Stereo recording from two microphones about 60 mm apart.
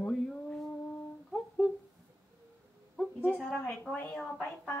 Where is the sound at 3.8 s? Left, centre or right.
Left.